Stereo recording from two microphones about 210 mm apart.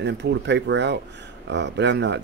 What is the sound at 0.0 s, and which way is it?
Speech, 55° right (ahead or behind).